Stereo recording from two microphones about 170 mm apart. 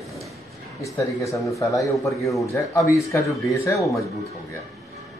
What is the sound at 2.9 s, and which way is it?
Speech, 20° left (ahead or behind).